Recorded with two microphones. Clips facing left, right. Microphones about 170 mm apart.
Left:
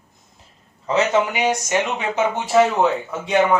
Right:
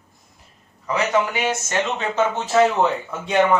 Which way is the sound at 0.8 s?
25° left (ahead or behind).